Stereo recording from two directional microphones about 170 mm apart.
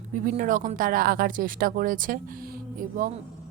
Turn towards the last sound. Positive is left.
turn(degrees=-55)  # may be behind; listen again after turning